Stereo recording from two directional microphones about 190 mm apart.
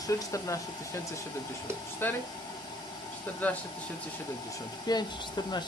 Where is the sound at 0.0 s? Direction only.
15° left (ahead or behind).